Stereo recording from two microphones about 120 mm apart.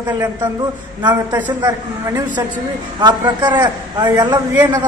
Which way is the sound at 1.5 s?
35° right (ahead or behind).